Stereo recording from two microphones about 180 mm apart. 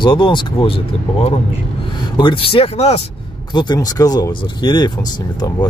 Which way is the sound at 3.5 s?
20° left (ahead or behind).